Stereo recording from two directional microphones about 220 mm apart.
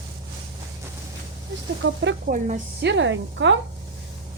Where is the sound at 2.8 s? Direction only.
55° right (ahead or behind).